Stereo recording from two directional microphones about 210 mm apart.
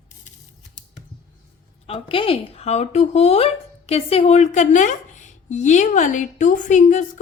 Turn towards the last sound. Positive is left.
turn(degrees=35)  # may be behind; listen again after turning